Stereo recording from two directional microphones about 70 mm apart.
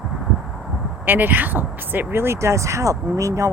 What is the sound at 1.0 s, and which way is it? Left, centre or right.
Speech, right.